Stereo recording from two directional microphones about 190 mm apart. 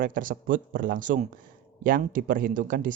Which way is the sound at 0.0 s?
45° right (ahead or behind).